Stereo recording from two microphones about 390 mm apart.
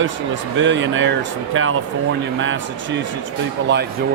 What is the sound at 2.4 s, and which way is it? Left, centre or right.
Speech, right.